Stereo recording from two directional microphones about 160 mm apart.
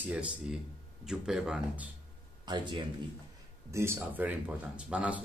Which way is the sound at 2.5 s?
25° right (ahead or behind).